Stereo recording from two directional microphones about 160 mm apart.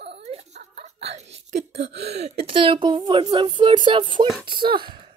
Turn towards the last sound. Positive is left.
turn(degrees=-30)  # may be behind; listen again after turning